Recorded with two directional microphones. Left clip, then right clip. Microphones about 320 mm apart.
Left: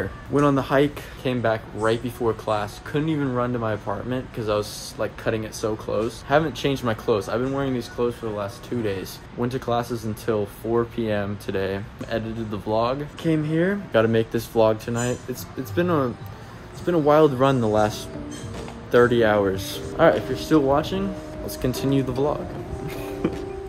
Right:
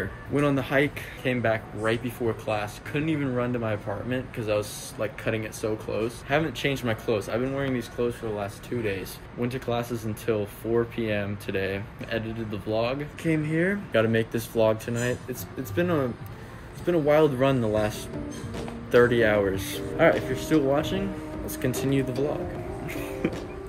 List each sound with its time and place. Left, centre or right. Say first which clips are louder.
0.3 s speech: left 5 dB; centre
22.8 s music: left 3 dB; centre